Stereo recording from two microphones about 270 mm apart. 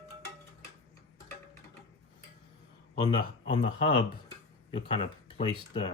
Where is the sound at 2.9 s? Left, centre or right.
Centre.